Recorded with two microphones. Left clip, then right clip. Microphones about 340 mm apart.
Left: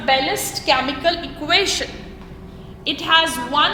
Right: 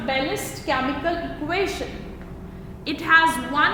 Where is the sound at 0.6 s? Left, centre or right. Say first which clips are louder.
Left 6 dB; left.